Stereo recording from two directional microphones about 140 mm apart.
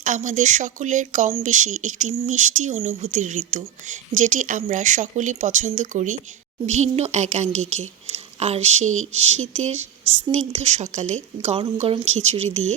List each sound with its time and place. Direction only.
0.0 s speech: 65° right (ahead or behind)